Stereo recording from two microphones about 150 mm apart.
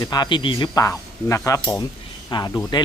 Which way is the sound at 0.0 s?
25° left (ahead or behind).